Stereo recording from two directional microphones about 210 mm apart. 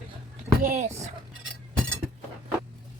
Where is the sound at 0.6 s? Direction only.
40° right (ahead or behind).